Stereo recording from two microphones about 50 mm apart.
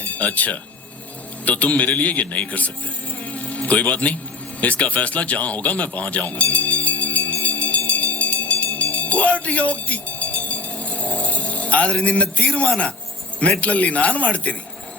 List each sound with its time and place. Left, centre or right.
0.0 s speech: left
3.2 s music: left
4.6 s a sound: left
13.6 s speech: left